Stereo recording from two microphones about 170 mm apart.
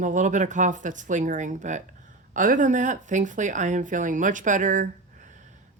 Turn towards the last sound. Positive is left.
turn(degrees=-45)  # may be behind; listen again after turning